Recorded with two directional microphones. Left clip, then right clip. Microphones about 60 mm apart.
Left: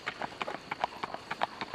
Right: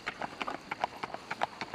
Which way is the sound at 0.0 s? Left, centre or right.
Centre.